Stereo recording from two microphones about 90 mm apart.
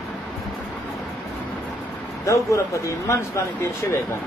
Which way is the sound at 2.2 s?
35° left (ahead or behind).